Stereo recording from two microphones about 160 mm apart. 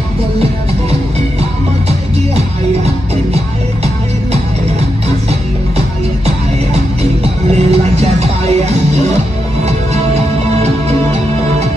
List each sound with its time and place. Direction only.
1.9 s music: 40° right (ahead or behind)
7.5 s music: 40° right (ahead or behind)